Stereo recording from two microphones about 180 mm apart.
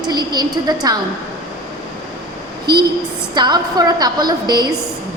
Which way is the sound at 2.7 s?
25° right (ahead or behind).